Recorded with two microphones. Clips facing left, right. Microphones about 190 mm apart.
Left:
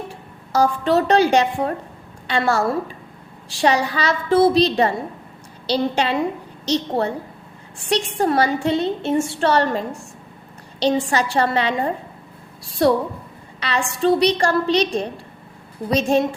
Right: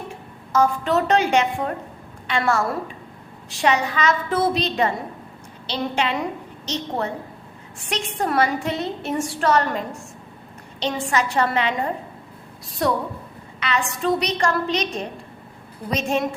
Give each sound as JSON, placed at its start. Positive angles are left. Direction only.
{"t": 0.5, "sound": "a woman's voice", "side_deg": 35}